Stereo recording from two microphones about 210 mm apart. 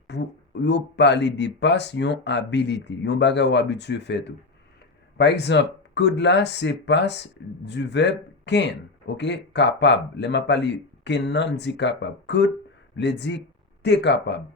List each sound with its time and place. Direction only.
0.1 s speech: 55° left (ahead or behind)